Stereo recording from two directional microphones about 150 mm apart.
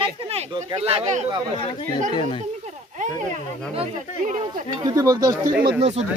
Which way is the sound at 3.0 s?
60° right (ahead or behind).